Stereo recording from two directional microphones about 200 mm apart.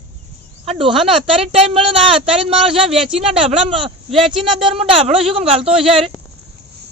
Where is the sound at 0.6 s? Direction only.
30° right (ahead or behind).